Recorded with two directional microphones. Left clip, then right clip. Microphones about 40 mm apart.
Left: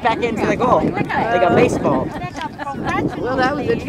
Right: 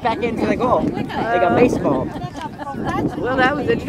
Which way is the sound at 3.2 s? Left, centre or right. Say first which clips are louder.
Right 2 dB; left.